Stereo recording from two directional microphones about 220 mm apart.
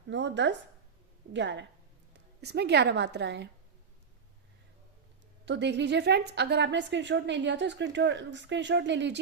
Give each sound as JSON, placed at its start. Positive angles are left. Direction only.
{"t": 0.1, "sound": "a woman's voice", "side_deg": -55}
{"t": 5.5, "sound": "a woman's voice", "side_deg": -55}